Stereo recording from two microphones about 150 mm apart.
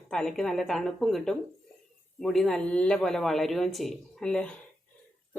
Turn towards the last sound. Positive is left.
turn(degrees=5)  # may be behind; listen again after turning